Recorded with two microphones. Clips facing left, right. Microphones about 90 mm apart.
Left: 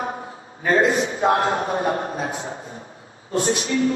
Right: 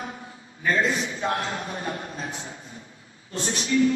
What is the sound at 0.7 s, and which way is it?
A woman's voice, 45° left (ahead or behind).